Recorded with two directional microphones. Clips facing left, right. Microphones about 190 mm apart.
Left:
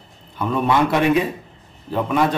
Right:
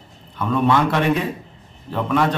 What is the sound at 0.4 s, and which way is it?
A man's voice, 10° left (ahead or behind).